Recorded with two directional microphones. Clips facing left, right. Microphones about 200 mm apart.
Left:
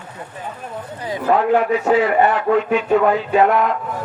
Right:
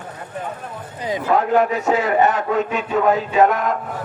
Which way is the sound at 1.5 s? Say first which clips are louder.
Left 2 dB; 45° right (ahead or behind).